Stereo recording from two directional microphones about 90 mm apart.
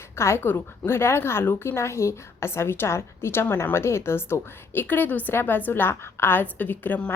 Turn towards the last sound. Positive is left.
turn(degrees=20)  # may be behind; listen again after turning